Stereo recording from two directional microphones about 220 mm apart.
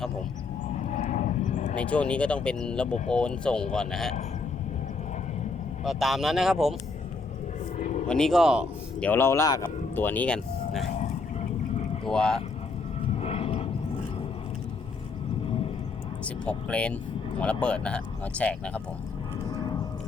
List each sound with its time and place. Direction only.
0.8 s vehicle: 30° left (ahead or behind)
1.7 s speech: 5° left (ahead or behind)
5.8 s speech: centre (ahead or behind)
7.8 s vehicle: 35° left (ahead or behind)
8.0 s speech: 5° left (ahead or behind)
9.0 s speech: 10° left (ahead or behind)
10.9 s a sound: 30° left (ahead or behind)
12.1 s speech: 5° left (ahead or behind)
13.1 s vehicle: 25° left (ahead or behind)
15.4 s a sound: 25° left (ahead or behind)
16.2 s speech: 5° left (ahead or behind)
19.5 s clip-clop: 20° left (ahead or behind)